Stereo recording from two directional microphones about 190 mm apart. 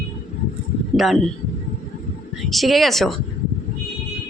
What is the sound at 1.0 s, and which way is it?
Speech, centre (ahead or behind).